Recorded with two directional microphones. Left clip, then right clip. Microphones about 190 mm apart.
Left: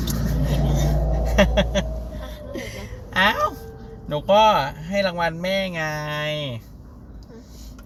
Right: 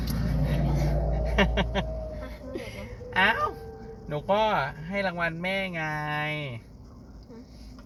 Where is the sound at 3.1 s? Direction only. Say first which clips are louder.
Left 4 dB; 20° left (ahead or behind).